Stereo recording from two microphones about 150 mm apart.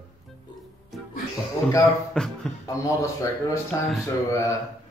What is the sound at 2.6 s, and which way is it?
Speech, 20° left (ahead or behind).